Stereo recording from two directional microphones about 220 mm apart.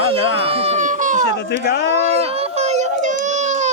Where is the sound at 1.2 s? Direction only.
50° left (ahead or behind).